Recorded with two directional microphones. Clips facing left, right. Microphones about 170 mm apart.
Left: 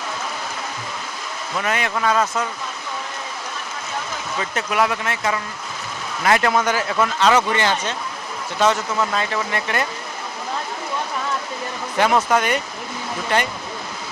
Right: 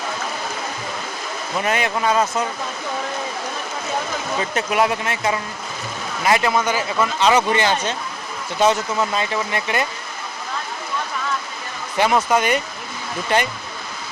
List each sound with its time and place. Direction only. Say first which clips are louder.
1.5 s speech: right 2 dB; 20° right (ahead or behind)
4.5 s speech: right 1 dB; 20° right (ahead or behind)
6.5 s a man's voice: even; 5° right (ahead or behind)
11.9 s speech: even; 10° right (ahead or behind)